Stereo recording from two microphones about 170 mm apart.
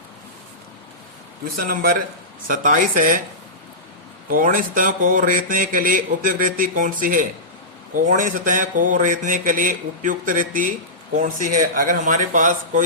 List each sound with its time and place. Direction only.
1.5 s speech: 55° right (ahead or behind)
4.3 s speech: 55° right (ahead or behind)